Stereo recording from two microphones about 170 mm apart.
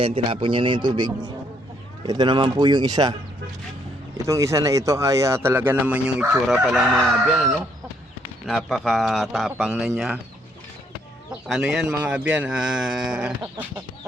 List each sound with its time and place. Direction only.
0.0 s a man's voice: 30° right (ahead or behind)
4.3 s speech: 20° right (ahead or behind); by 10.2 s centre (ahead or behind)
11.4 s speech: centre (ahead or behind)